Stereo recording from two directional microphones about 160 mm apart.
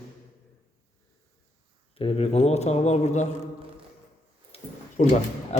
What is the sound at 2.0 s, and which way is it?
A man's voice, 40° left (ahead or behind).